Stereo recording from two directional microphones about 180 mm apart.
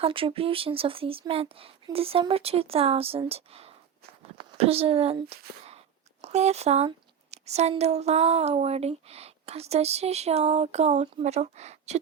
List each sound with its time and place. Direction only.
0.0 s a woman's voice: 30° right (ahead or behind)